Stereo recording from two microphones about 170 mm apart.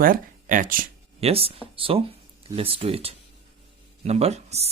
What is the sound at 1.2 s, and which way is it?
Speech, 35° right (ahead or behind).